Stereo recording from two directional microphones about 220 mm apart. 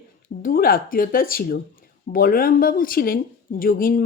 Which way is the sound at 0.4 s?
40° left (ahead or behind).